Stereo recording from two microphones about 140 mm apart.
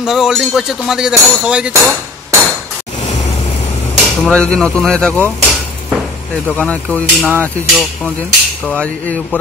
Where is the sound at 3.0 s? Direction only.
50° left (ahead or behind).